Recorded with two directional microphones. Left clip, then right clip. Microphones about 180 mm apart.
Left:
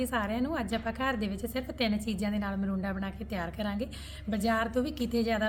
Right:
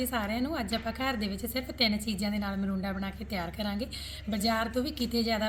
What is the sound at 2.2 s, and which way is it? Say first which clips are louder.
A woman's voice: even; 5° left (ahead or behind).